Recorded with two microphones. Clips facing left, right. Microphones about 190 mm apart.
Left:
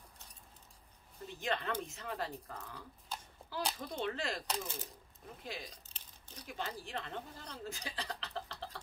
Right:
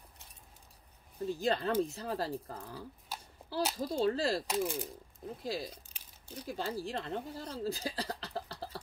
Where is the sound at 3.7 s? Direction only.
35° right (ahead or behind).